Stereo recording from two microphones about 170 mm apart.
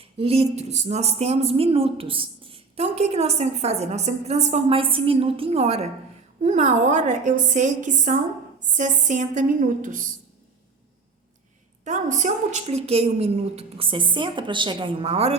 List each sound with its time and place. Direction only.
0.0 s a woman's voice: 35° right (ahead or behind); by 10.1 s 50° right (ahead or behind)
11.9 s speech: 45° right (ahead or behind)